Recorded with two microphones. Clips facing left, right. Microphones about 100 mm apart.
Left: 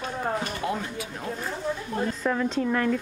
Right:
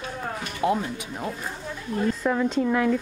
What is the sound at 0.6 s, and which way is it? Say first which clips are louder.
Speech: right 5 dB; 25° right (ahead or behind).